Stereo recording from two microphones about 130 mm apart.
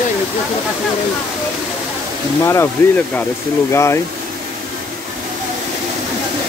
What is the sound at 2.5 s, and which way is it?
Speech, 15° left (ahead or behind).